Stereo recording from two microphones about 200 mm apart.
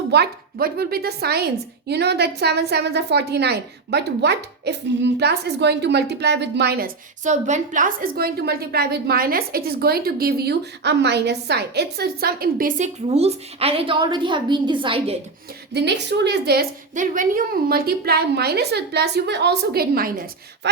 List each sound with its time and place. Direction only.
0.1 s a woman's voice: 50° right (ahead or behind); by 15.2 s 30° right (ahead or behind)
15.7 s a woman's voice: 60° right (ahead or behind)
16.9 s a woman's voice: 40° right (ahead or behind)